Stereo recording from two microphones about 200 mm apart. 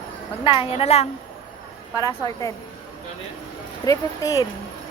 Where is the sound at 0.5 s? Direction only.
30° left (ahead or behind).